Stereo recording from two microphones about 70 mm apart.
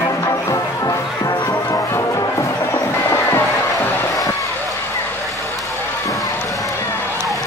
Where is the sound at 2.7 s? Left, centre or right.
Left.